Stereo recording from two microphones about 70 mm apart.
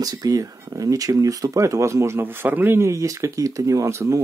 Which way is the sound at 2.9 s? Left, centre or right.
Right.